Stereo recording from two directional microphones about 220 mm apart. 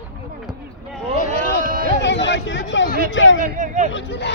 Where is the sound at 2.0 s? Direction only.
55° left (ahead or behind).